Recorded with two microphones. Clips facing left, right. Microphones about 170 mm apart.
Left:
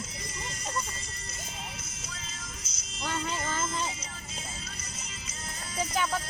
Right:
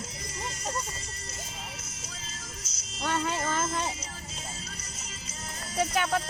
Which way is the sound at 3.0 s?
40° right (ahead or behind).